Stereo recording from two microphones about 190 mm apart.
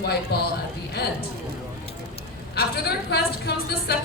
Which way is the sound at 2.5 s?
60° left (ahead or behind).